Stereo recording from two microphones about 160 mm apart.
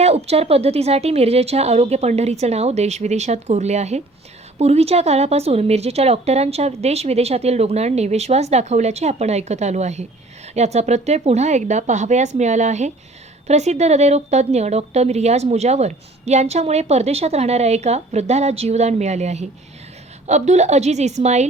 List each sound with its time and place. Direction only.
0.0 s a woman's voice: 40° right (ahead or behind)